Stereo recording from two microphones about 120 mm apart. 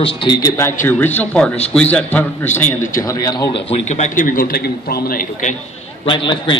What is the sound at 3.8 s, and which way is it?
Speech, 85° left.